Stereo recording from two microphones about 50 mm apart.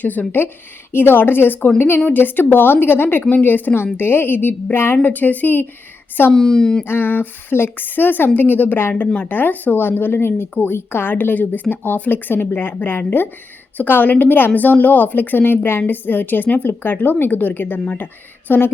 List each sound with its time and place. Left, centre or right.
0.0 s a woman's voice: left
5.0 s a woman's voice: left
6.3 s a woman's voice: centre
6.8 s a woman's voice: left